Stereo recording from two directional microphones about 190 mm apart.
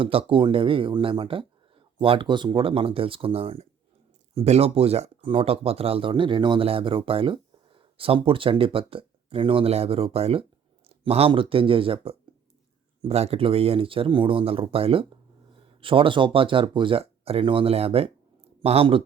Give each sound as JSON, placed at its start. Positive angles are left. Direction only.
{"t": 0.0, "sound": "speech", "side_deg": -30}